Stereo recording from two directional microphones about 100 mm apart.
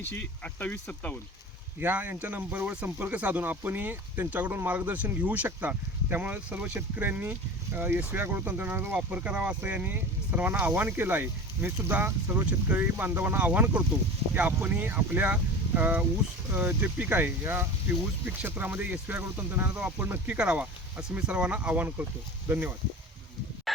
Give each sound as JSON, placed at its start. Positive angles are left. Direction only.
{"t": 0.1, "sound": "speech", "side_deg": 20}
{"t": 1.8, "sound": "speech", "side_deg": -20}
{"t": 23.7, "sound": "a sound", "side_deg": 0}